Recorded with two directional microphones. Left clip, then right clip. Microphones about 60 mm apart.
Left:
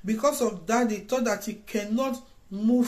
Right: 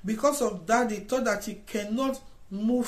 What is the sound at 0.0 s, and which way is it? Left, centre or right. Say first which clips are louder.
Speech: left 1 dB; right.